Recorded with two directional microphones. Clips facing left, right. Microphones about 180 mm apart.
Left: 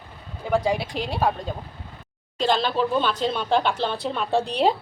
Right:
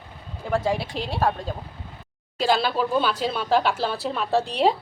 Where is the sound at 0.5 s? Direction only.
Centre (ahead or behind).